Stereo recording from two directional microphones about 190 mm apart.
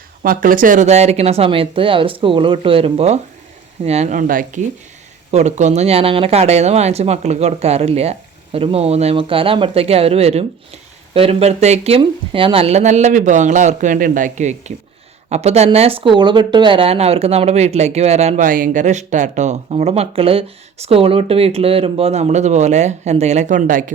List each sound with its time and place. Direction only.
0.2 s speech: 45° right (ahead or behind)